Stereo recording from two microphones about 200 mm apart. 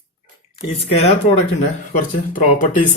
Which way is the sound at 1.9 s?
45° left (ahead or behind).